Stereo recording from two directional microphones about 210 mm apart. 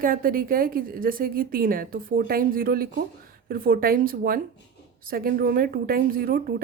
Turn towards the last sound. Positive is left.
turn(degrees=-45)  # may be behind; listen again after turning